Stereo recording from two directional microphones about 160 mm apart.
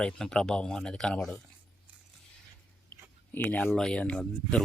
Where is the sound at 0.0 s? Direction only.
5° left (ahead or behind).